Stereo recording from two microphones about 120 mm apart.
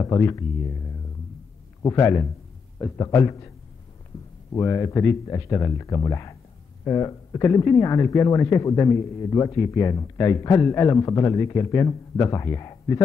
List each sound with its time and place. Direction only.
0.0 s speech: 30° left (ahead or behind)
1.8 s a man's voice: 25° left (ahead or behind)
4.5 s speech: 25° left (ahead or behind)